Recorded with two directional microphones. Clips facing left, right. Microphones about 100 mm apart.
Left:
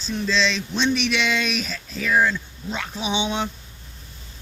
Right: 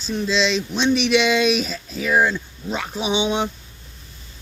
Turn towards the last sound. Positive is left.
turn(degrees=-15)  # may be behind; listen again after turning